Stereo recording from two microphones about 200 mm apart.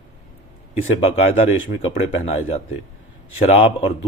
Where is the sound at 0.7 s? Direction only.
30° left (ahead or behind).